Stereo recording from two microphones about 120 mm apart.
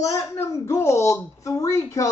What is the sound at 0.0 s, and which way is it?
Speech, 25° left (ahead or behind).